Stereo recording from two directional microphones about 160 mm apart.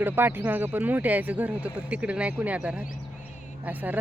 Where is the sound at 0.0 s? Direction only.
15° right (ahead or behind).